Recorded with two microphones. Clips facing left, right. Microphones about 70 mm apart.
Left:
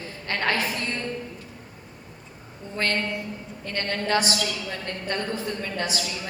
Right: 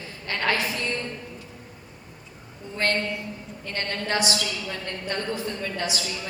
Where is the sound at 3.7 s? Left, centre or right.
Left.